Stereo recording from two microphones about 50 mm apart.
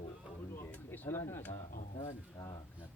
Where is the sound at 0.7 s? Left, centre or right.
Left.